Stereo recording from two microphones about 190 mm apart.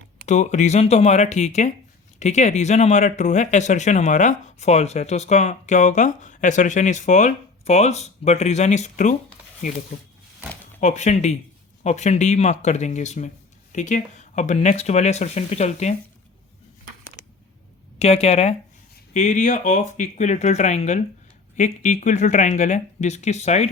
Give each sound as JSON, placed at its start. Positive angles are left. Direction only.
{"t": 0.3, "sound": "speech", "side_deg": 40}
{"t": 10.8, "sound": "speech", "side_deg": 40}
{"t": 18.0, "sound": "speech", "side_deg": 35}